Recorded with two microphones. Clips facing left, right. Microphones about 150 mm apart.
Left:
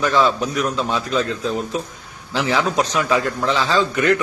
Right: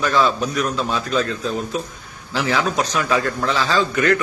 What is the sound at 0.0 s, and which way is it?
A man's voice, 15° left (ahead or behind).